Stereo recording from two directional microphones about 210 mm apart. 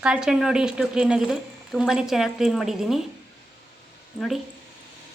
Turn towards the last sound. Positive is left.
turn(degrees=0)  # may be behind; listen again after turning